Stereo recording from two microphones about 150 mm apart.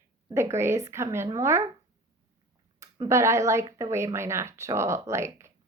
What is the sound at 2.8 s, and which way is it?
A woman's voice, 20° right (ahead or behind).